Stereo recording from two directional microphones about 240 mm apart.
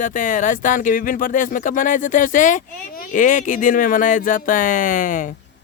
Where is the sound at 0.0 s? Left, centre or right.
Left.